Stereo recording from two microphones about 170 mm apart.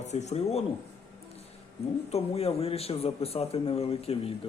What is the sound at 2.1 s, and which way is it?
A man's voice, 35° left (ahead or behind).